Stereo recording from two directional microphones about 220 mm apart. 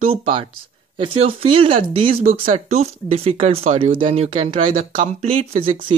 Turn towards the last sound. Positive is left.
turn(degrees=-25)  # may be behind; listen again after turning